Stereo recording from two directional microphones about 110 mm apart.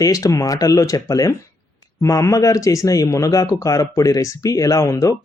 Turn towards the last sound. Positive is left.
turn(degrees=30)  # may be behind; listen again after turning